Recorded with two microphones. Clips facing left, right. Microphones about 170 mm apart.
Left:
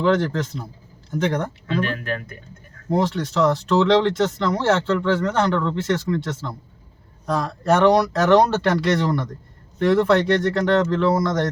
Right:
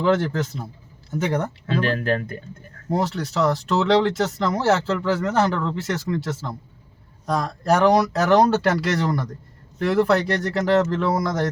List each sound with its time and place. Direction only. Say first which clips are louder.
0.0 s speech: left 1 dB; 5° right (ahead or behind)
1.6 s speech: right 2 dB; 35° right (ahead or behind)
2.9 s speech: left 2 dB; centre (ahead or behind)